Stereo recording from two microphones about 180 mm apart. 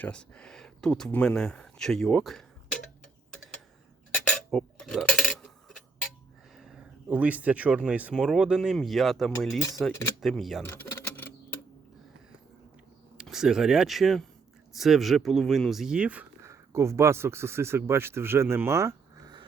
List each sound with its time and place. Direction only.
0.0 s speech: 5° left (ahead or behind)
4.3 s cutlery: 5° left (ahead or behind)
6.6 s speech: centre (ahead or behind)
10.6 s a sound: 15° left (ahead or behind)
13.1 s speech: 5° right (ahead or behind); by 19.5 s 25° right (ahead or behind)